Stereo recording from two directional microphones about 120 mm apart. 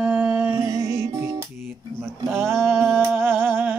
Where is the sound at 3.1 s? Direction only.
20° right (ahead or behind).